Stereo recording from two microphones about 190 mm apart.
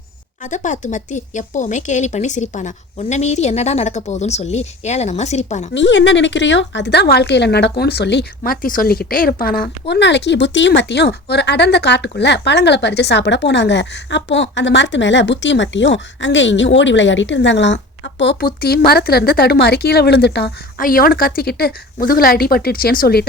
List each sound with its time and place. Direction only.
0.4 s speech: 40° left (ahead or behind)
5.7 s a woman's voice: 70° left (ahead or behind); by 23.2 s 50° left (ahead or behind)